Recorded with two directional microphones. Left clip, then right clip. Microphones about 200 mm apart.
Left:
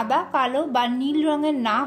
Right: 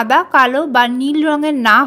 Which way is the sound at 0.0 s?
40° right (ahead or behind).